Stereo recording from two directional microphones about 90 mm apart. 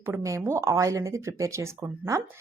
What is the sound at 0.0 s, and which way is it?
A woman's voice, 30° right (ahead or behind).